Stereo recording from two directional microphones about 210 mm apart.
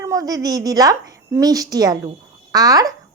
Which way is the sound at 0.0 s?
15° right (ahead or behind).